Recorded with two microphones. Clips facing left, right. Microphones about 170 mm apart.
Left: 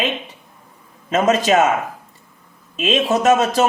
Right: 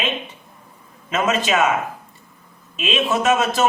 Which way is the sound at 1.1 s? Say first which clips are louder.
Left 4 dB; 40° left (ahead or behind).